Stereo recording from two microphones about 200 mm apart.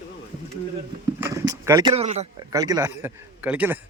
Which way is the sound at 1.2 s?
15° right (ahead or behind).